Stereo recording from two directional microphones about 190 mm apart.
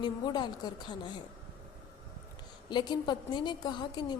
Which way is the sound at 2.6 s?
25° left (ahead or behind).